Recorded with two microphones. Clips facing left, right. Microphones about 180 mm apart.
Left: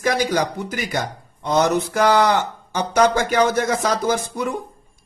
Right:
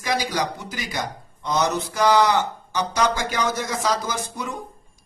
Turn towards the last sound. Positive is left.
turn(degrees=60)  # may be behind; listen again after turning